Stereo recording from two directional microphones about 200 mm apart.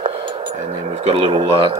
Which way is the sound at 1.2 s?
25° right (ahead or behind).